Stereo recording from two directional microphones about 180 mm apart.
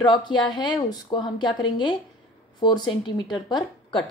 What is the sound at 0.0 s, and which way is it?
A woman's voice, 25° left (ahead or behind).